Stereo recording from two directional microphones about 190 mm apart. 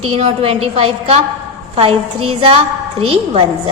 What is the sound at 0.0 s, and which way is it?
A woman's voice, 30° right (ahead or behind).